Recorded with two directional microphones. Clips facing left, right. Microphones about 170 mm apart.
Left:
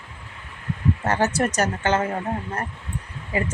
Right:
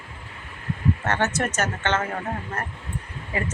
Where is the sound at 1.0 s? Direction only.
35° left (ahead or behind).